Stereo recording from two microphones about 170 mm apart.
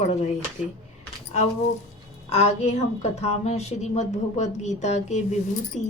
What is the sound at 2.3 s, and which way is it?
A woman's voice, 40° left (ahead or behind).